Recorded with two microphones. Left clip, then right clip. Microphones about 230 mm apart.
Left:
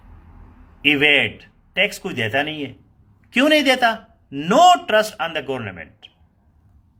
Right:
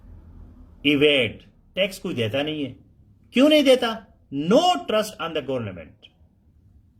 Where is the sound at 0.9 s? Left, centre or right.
Centre.